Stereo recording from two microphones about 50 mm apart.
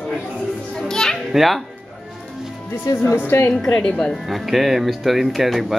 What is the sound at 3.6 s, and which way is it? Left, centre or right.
Speech, left.